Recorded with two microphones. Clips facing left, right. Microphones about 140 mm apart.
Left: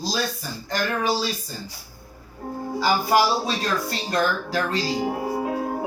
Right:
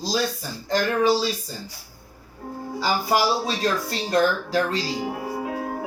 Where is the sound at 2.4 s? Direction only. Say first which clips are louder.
Left 3 dB; 35° left (ahead or behind).